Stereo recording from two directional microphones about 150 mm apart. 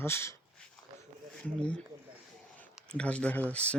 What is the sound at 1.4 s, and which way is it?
Speech, 10° left (ahead or behind).